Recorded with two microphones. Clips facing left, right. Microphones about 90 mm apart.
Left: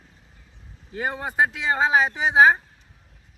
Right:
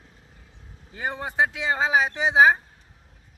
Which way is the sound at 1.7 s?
5° right (ahead or behind).